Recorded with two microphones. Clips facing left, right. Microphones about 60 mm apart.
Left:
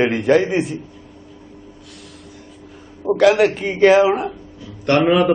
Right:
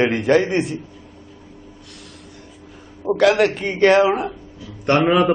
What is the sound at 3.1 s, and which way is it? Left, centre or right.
A man's voice, centre.